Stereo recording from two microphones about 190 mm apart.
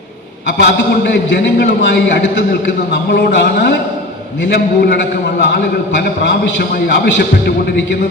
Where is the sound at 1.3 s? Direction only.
65° left (ahead or behind).